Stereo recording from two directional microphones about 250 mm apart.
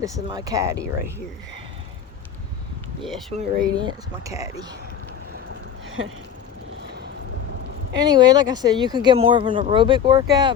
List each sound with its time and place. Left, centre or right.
0.0 s speech: centre
3.0 s speech: centre
3.3 s speech: centre
8.1 s speech: centre